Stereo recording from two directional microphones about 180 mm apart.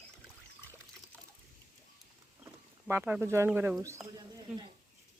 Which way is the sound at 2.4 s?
15° right (ahead or behind).